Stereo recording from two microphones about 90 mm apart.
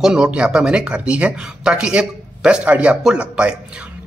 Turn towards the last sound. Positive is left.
turn(degrees=-10)  # may be behind; listen again after turning